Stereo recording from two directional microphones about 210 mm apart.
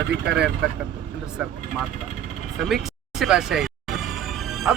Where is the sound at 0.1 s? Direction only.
55° right (ahead or behind).